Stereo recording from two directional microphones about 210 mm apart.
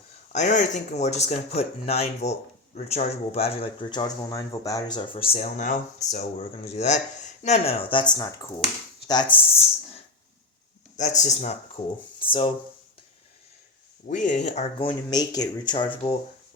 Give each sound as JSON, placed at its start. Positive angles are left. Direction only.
{"t": 0.3, "sound": "speech", "side_deg": 35}
{"t": 9.3, "sound": "speech", "side_deg": 25}
{"t": 14.1, "sound": "speech", "side_deg": 35}